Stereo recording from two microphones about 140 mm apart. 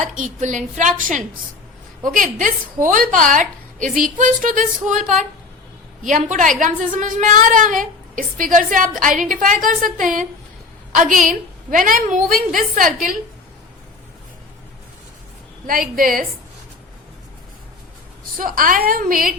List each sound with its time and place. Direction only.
0.0 s a woman's voice: 65° right (ahead or behind)
2.0 s a woman's voice: 75° right (ahead or behind)
15.6 s a woman's voice: 85° right
18.3 s a woman's voice: 85° right